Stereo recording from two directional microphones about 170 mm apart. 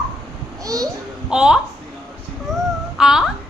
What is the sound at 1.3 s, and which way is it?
Speech, 5° right (ahead or behind).